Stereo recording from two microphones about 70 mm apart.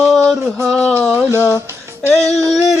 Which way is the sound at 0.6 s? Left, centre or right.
Centre.